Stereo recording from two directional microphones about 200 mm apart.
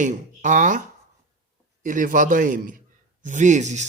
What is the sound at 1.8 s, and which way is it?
Speech, 40° right (ahead or behind).